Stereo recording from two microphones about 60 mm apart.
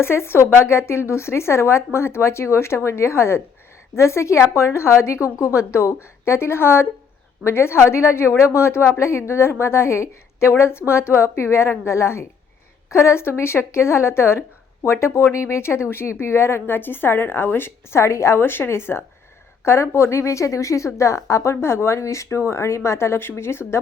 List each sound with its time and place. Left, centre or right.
0.0 s a woman's voice: left